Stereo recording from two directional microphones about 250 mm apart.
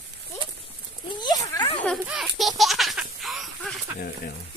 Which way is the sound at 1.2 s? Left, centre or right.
Centre.